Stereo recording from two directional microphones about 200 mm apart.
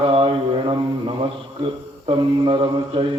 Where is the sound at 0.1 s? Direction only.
25° right (ahead or behind).